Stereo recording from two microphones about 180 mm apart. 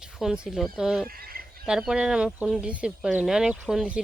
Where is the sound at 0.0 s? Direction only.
5° right (ahead or behind).